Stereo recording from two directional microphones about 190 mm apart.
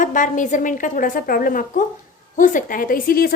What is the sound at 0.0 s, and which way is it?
A woman's voice, 45° left (ahead or behind).